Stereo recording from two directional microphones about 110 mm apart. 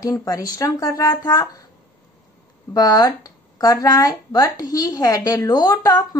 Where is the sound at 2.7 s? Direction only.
35° left (ahead or behind).